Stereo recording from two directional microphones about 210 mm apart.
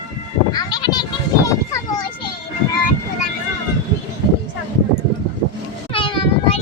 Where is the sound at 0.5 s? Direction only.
20° left (ahead or behind).